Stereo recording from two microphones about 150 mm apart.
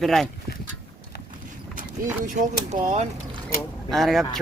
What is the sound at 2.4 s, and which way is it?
Speech, 55° right (ahead or behind).